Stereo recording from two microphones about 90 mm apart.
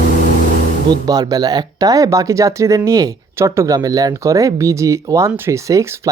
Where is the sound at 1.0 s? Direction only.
45° right (ahead or behind).